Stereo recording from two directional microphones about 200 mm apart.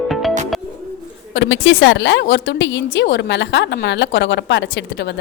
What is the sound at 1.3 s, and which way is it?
A woman's voice, 65° left (ahead or behind).